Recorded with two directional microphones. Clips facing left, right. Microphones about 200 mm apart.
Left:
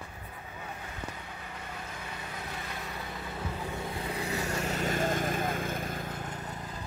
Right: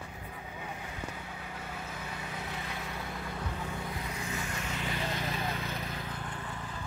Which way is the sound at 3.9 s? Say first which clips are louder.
Left 4 dB; 30° left (ahead or behind).